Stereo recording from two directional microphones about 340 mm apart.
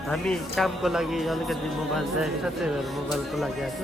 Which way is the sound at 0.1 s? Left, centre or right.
Centre.